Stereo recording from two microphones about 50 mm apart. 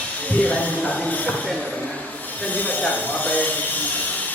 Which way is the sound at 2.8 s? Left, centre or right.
Left.